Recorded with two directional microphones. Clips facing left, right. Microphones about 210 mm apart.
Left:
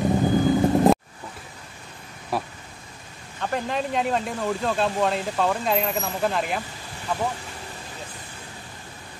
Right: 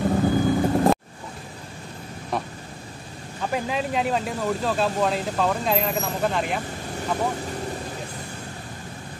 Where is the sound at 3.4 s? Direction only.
5° right (ahead or behind).